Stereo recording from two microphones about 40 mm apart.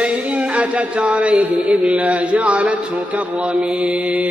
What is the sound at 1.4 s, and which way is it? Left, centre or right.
Mantra, right.